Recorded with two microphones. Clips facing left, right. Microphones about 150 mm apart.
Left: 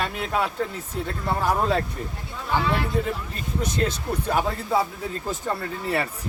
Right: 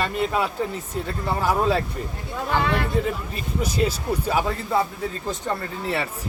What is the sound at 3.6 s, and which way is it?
Speech, 10° right (ahead or behind).